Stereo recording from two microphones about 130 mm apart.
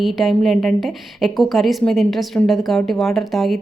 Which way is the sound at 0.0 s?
Centre (ahead or behind).